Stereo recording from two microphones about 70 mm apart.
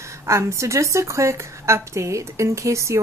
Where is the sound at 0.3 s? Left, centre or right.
Right.